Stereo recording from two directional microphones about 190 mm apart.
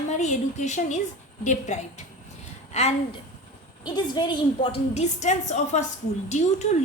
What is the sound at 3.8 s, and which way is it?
A woman's voice, 20° left (ahead or behind).